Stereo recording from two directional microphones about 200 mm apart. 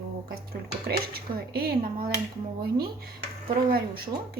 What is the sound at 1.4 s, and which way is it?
Speech, 50° right (ahead or behind).